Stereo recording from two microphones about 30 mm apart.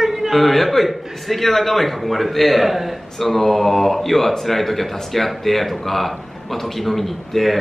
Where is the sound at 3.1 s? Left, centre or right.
Centre.